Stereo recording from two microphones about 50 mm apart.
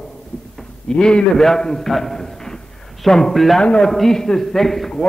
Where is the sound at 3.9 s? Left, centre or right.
Centre.